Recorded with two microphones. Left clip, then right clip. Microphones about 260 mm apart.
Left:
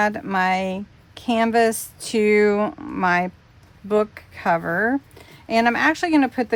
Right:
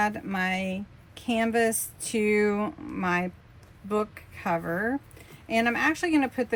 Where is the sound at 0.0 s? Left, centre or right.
Left.